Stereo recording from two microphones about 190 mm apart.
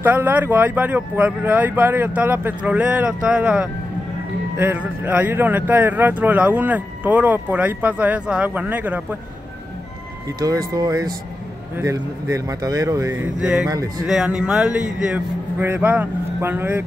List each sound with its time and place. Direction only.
0.0 s speech: 10° right (ahead or behind)
10.4 s speech: 20° right (ahead or behind)